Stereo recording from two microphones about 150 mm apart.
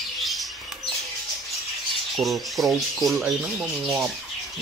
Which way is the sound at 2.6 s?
Centre (ahead or behind).